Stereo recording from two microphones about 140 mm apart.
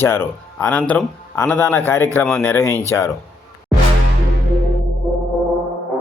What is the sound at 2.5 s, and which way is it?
Speech, 15° left (ahead or behind).